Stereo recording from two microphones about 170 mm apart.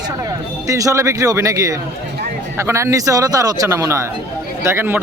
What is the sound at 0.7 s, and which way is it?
Speech, 20° right (ahead or behind).